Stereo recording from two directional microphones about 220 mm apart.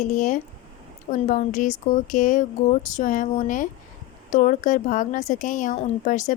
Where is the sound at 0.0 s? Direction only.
35° left (ahead or behind).